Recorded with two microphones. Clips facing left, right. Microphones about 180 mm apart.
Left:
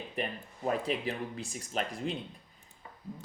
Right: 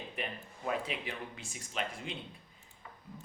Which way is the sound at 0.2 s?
40° left (ahead or behind).